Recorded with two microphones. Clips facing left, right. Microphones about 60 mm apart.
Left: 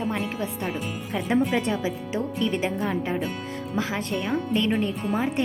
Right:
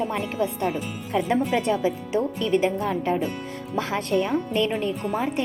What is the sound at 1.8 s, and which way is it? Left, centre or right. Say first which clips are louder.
A woman's voice: right 4 dB; centre.